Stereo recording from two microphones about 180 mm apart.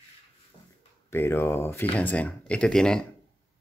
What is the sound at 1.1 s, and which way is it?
Speech, 15° left (ahead or behind).